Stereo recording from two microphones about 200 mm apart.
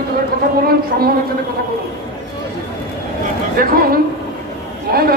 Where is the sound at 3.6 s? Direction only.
45° right (ahead or behind).